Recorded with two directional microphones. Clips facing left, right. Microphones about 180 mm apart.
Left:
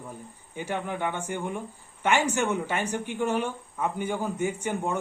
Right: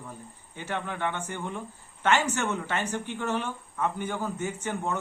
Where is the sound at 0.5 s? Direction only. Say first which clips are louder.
Left 3 dB; 15° left (ahead or behind).